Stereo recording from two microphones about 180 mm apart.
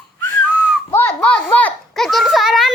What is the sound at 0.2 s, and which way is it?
Whistling, 15° left (ahead or behind).